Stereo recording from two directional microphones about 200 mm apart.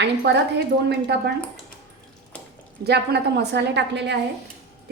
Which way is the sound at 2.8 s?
55° right (ahead or behind).